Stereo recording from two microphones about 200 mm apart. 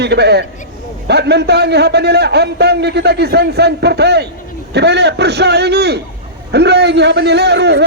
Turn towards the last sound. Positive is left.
turn(degrees=-55)  # may be behind; listen again after turning